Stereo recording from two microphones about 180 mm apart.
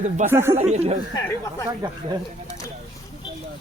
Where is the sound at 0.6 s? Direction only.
35° right (ahead or behind).